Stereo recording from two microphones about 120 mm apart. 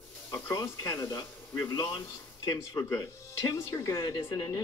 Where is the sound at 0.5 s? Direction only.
25° left (ahead or behind).